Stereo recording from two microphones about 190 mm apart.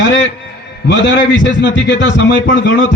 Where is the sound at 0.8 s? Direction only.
70° left (ahead or behind).